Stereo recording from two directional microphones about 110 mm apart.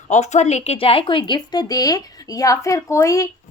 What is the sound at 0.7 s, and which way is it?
A woman's voice, 55° left (ahead or behind).